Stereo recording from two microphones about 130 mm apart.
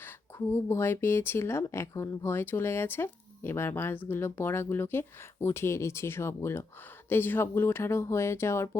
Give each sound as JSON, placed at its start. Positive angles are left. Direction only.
{"t": 0.0, "sound": "speech", "side_deg": 20}